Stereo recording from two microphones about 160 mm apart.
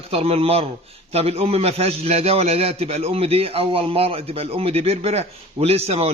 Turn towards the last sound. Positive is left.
turn(degrees=-40)  # may be behind; listen again after turning